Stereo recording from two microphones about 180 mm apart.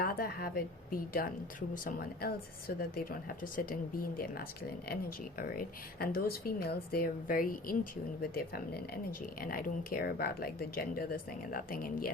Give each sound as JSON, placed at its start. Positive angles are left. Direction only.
{"t": 0.0, "sound": "a woman's voice", "side_deg": 55}